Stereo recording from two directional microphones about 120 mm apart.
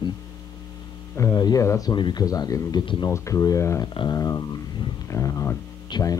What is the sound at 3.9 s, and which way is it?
Speech, 40° left (ahead or behind).